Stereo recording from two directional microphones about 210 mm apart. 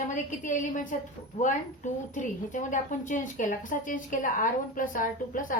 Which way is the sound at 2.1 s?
35° left (ahead or behind).